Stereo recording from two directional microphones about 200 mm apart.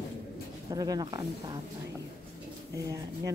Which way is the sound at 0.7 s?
20° right (ahead or behind).